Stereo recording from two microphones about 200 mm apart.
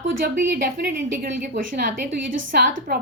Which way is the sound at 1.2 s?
45° right (ahead or behind).